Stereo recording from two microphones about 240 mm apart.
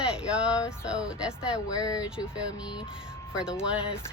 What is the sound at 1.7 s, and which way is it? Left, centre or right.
Speech, centre.